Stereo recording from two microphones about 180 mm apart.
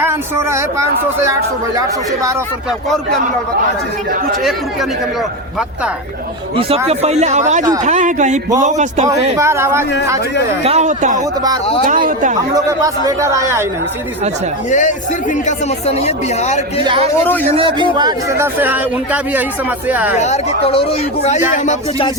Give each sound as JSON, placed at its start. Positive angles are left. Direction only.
{"t": 0.0, "sound": "speech", "side_deg": -15}
{"t": 6.8, "sound": "speech", "side_deg": -35}
{"t": 9.4, "sound": "speech", "side_deg": -15}
{"t": 10.6, "sound": "speech", "side_deg": -35}
{"t": 12.5, "sound": "speech", "side_deg": -20}
{"t": 14.7, "sound": "speech", "side_deg": 45}
{"t": 16.8, "sound": "speech", "side_deg": -30}
{"t": 17.9, "sound": "speech", "side_deg": -20}
{"t": 20.1, "sound": "speech", "side_deg": 40}